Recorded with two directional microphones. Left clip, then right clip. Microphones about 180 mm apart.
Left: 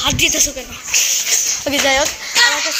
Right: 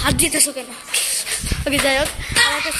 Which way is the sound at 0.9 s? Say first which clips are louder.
Left 7 dB; 15° right (ahead or behind).